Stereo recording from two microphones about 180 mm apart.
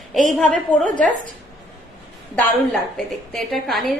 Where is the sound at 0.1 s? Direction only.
Centre (ahead or behind).